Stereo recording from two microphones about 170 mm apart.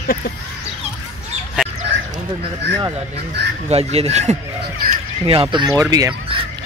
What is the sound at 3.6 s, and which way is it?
Speech, 35° right (ahead or behind).